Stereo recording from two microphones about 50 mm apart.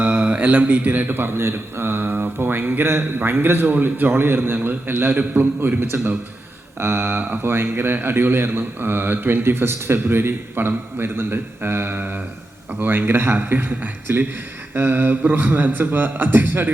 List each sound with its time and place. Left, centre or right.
0.0 s speech: right
1.5 s a sound: right
3.2 s a man's voice: right
6.7 s a man's voice: right
7.5 s a man's voice: right